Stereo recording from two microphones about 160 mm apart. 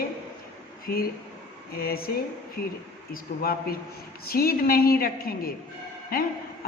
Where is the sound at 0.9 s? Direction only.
65° left (ahead or behind).